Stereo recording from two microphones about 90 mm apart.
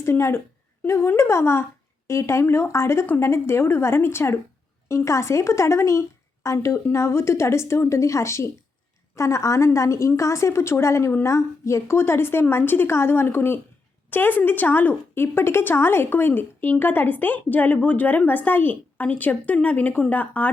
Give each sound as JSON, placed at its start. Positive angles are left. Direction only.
{"t": 0.0, "sound": "a woman's voice", "side_deg": 30}